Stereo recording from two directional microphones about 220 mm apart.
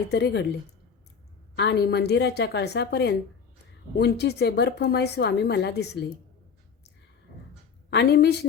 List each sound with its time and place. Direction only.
0.1 s a woman's voice: 50° left (ahead or behind)
1.5 s a woman's voice: 50° left (ahead or behind)
7.9 s a woman's voice: 50° left (ahead or behind)